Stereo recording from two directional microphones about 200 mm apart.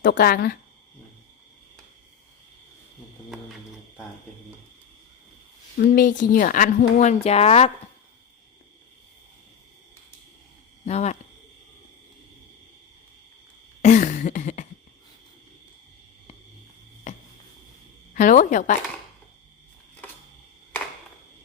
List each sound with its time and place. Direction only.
0.1 s speech: 50° left (ahead or behind)
5.8 s speech: 45° left (ahead or behind)
10.8 s speech: 35° left (ahead or behind)
13.8 s a sound: 40° left (ahead or behind)
18.1 s speech: 45° left (ahead or behind)